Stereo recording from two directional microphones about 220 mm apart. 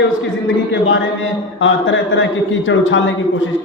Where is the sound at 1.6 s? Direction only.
60° left (ahead or behind).